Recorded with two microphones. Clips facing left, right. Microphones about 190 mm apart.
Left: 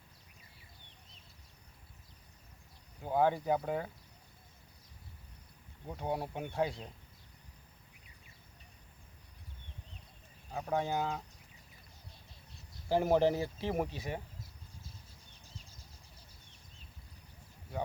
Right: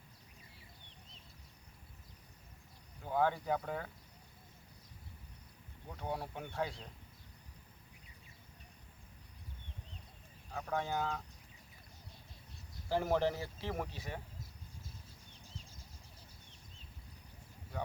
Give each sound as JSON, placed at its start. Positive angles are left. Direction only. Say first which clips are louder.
{"t": 3.0, "sound": "speech", "louder": "left 4 dB", "side_deg": 15}
{"t": 5.9, "sound": "speech", "louder": "left 4 dB", "side_deg": 20}
{"t": 10.5, "sound": "speech", "louder": "left 4 dB", "side_deg": 20}
{"t": 12.9, "sound": "speech", "louder": "left 5 dB", "side_deg": 15}